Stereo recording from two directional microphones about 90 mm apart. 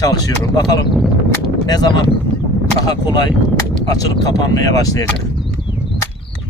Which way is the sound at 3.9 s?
45° left (ahead or behind).